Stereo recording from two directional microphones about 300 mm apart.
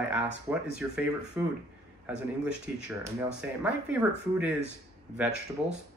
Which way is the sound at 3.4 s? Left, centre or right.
Centre.